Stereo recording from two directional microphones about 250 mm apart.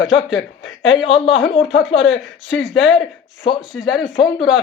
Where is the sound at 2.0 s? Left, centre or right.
Left.